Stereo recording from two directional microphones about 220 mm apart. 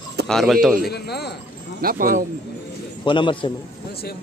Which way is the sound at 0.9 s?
45° left (ahead or behind).